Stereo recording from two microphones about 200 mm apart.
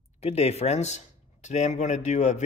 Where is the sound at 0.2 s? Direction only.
30° left (ahead or behind).